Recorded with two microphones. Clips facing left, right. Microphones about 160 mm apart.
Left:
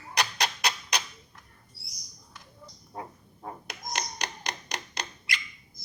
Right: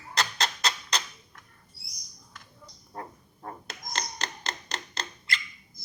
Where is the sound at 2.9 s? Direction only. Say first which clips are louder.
Even; 10° left (ahead or behind).